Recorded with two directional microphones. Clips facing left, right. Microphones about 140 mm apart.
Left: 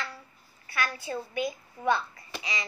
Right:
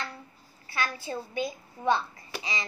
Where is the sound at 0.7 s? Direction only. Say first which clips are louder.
Even; 25° right (ahead or behind).